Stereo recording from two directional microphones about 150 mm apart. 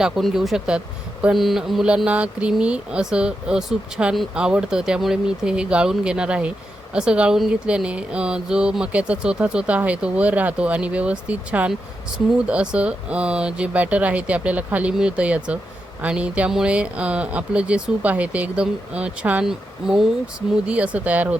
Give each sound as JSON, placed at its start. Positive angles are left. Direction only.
{"t": 0.0, "sound": "speech", "side_deg": 0}